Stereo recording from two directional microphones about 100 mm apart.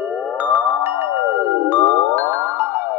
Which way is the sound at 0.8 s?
25° right (ahead or behind).